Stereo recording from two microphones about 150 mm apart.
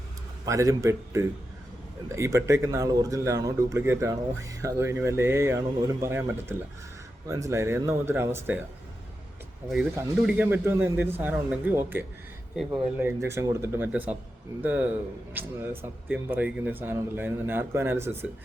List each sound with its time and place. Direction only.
0.4 s a man's voice: 20° right (ahead or behind)
9.9 s speech: 10° right (ahead or behind)
13.2 s speech: 20° right (ahead or behind)